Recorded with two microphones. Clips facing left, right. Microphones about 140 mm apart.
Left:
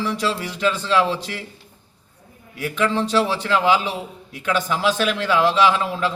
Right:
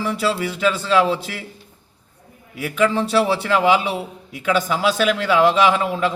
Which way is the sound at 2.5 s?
5° right (ahead or behind).